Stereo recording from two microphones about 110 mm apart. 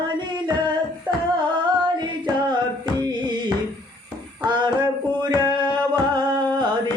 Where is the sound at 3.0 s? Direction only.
45° right (ahead or behind).